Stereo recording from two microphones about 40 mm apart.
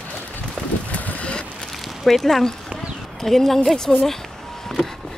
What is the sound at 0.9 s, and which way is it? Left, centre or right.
Vehicle, left.